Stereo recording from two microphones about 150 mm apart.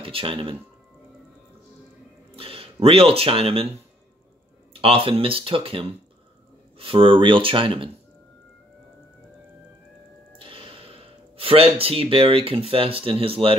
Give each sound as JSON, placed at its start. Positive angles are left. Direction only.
{"t": 0.0, "sound": "speech", "side_deg": -35}
{"t": 2.3, "sound": "speech", "side_deg": -40}
{"t": 4.7, "sound": "speech", "side_deg": -35}
{"t": 10.3, "sound": "speech", "side_deg": -35}